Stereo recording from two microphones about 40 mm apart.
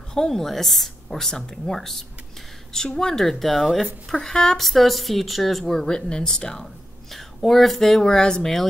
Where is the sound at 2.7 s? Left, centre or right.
Centre.